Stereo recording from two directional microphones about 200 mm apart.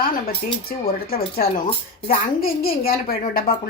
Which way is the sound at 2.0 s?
45° left (ahead or behind).